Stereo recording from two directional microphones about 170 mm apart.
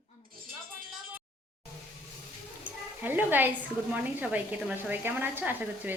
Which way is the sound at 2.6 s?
10° right (ahead or behind).